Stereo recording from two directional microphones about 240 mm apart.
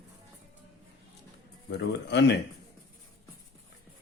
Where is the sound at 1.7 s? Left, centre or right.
Left.